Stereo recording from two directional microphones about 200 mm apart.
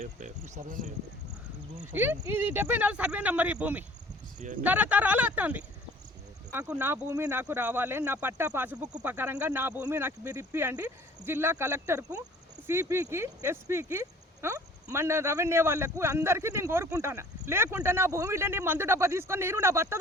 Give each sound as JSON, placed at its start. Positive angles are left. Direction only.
{"t": 0.0, "sound": "speech", "side_deg": -35}
{"t": 1.9, "sound": "speech", "side_deg": -10}